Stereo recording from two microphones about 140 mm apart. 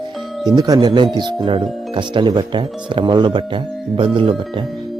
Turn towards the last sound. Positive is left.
turn(degrees=-35)  # may be behind; listen again after turning